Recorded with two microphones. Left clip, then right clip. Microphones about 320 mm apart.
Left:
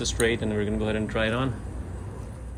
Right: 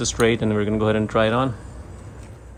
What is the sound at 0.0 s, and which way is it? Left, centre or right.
Speech, centre.